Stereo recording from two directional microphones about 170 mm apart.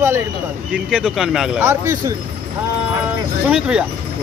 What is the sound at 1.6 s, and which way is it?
Speech, 15° right (ahead or behind).